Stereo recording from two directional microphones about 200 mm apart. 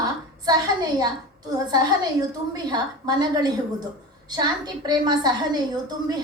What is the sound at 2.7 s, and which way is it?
A woman's voice, 20° right (ahead or behind).